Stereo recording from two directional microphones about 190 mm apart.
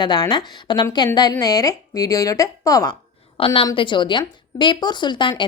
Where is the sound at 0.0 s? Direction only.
20° left (ahead or behind).